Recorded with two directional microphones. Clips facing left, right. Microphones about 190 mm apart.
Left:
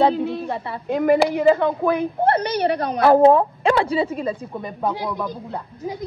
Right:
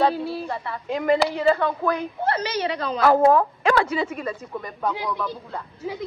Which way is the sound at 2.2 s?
55° left (ahead or behind).